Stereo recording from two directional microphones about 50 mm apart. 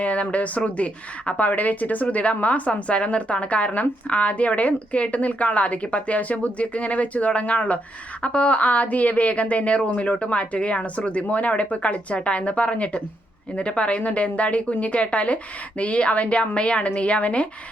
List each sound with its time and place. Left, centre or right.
0.0 s a woman's voice: left